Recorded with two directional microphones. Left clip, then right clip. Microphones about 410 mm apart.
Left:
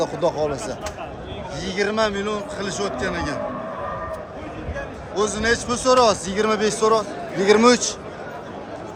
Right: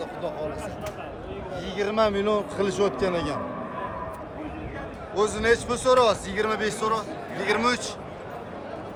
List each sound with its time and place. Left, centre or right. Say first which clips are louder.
0.0 s speech: left 10 dB; centre
1.6 s a man's voice: left 2 dB; centre
5.1 s a man's voice: left 1 dB; centre